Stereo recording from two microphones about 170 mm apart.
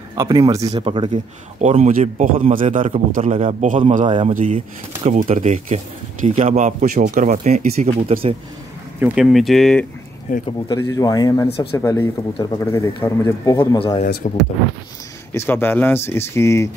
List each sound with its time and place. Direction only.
0.2 s speech: 20° right (ahead or behind)
0.7 s speech: 35° right (ahead or behind)
1.1 s speech: 45° right (ahead or behind)
2.8 s speech: 35° right (ahead or behind)
3.6 s speech: 50° right (ahead or behind)
4.5 s speech: 35° right (ahead or behind)
9.0 s speech: 5° right (ahead or behind)
10.4 s speech: 20° left (ahead or behind)
13.7 s speech: 30° left (ahead or behind)
14.2 s speech: 45° left (ahead or behind)
15.3 s speech: 10° left (ahead or behind)